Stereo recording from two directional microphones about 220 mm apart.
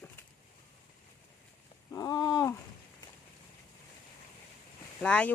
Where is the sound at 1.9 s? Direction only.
15° left (ahead or behind).